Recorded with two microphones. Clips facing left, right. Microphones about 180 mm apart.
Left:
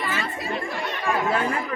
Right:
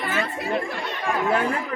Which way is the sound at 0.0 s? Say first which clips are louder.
Right 2 dB; 55° right (ahead or behind).